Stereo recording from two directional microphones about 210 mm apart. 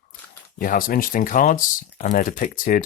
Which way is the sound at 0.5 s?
40° left (ahead or behind).